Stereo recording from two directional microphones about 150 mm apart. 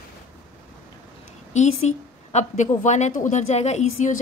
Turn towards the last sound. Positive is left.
turn(degrees=50)  # may be behind; listen again after turning